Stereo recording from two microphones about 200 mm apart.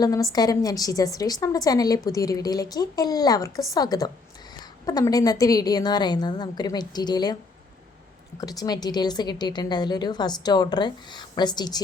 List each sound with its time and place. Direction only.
0.0 s a woman's voice: 15° left (ahead or behind)
8.4 s a woman's voice: 20° left (ahead or behind)